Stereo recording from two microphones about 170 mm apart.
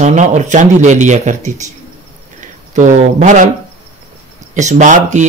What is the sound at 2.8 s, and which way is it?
Speech, 45° right (ahead or behind).